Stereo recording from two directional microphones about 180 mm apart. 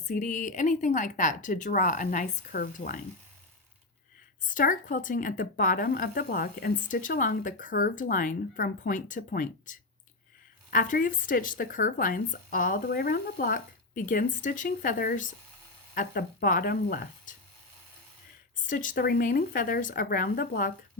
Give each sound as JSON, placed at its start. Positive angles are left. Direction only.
{"t": 0.1, "sound": "speech", "side_deg": 45}
{"t": 4.4, "sound": "speech", "side_deg": 50}
{"t": 18.5, "sound": "speech", "side_deg": 45}